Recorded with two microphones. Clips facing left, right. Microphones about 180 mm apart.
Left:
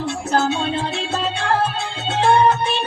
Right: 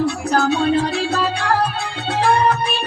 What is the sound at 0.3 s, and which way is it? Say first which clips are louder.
Music: right 2 dB; 25° left (ahead or behind).